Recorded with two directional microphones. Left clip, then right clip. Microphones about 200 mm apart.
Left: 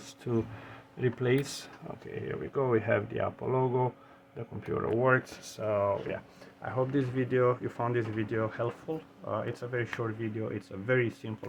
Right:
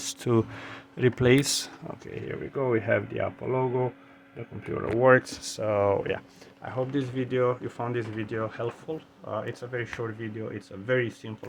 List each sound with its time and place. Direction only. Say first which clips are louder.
0.0 s speech: right 7 dB; 50° right (ahead or behind)
2.2 s speech: right 2 dB; 20° right (ahead or behind)
4.9 s speech: right 8 dB; 35° right (ahead or behind)
5.8 s speech: right 5 dB; 60° right (ahead or behind)
6.7 s speech: right 1 dB; centre (ahead or behind)